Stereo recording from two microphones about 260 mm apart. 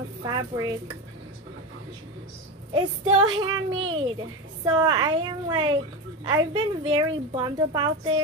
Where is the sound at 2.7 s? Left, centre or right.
Centre.